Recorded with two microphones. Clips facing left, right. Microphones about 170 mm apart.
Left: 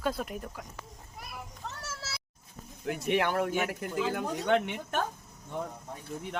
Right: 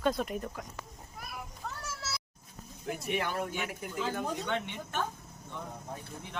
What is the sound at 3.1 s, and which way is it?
Speech, 70° left (ahead or behind).